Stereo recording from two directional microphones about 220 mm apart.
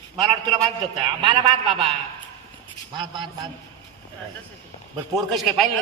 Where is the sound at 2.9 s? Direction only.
20° right (ahead or behind).